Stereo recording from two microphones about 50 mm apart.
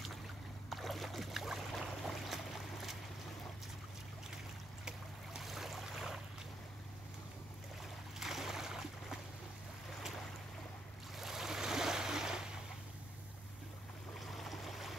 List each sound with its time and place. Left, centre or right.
0.7 s boat: centre
5.4 s a sound: centre
8.2 s boat: centre
11.1 s waves: centre
14.2 s boat: centre